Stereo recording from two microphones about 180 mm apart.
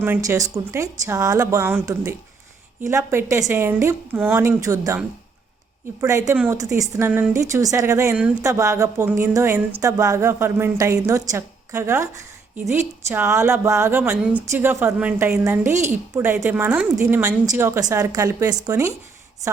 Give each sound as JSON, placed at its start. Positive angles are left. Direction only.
{"t": 0.0, "sound": "speech", "side_deg": -15}
{"t": 6.0, "sound": "speech", "side_deg": -15}